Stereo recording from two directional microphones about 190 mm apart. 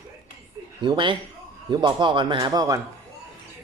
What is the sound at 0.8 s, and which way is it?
Speech, 25° right (ahead or behind).